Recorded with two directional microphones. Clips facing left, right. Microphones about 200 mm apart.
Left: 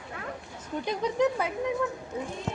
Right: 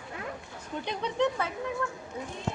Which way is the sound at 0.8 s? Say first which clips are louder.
Left 3 dB; 5° left (ahead or behind).